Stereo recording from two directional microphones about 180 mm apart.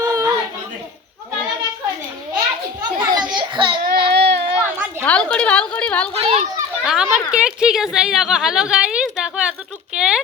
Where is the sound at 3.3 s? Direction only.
25° right (ahead or behind).